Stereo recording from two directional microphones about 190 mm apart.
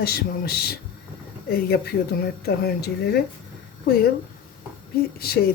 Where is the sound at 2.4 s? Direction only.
55° left (ahead or behind).